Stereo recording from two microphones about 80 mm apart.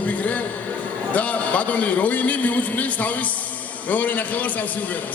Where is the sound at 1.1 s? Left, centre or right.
Centre.